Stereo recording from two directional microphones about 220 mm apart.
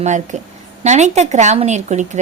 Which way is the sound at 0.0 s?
35° right (ahead or behind).